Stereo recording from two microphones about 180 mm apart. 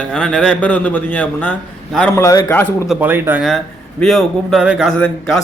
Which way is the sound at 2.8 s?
10° right (ahead or behind).